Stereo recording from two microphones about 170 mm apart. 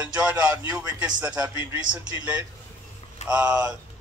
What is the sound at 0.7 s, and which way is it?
Speech, 20° right (ahead or behind).